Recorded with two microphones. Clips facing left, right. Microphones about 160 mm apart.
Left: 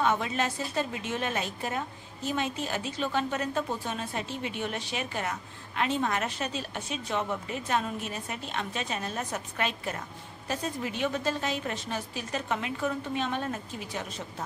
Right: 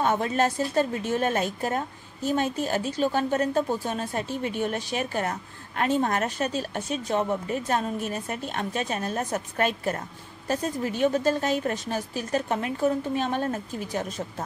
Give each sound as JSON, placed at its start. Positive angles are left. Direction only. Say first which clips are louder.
{"t": 0.0, "sound": "a woman's voice", "louder": "right 4 dB", "side_deg": -45}